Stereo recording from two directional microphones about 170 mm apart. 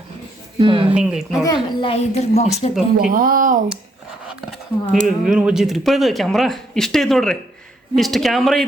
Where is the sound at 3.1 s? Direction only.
55° right (ahead or behind).